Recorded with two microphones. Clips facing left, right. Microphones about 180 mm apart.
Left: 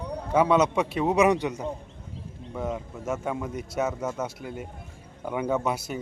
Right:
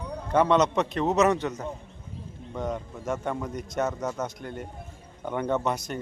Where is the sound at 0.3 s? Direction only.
5° left (ahead or behind).